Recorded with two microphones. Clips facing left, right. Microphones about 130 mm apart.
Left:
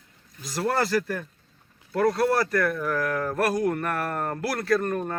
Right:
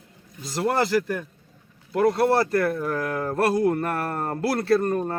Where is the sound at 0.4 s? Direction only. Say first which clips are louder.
Right 2 dB; 20° right (ahead or behind).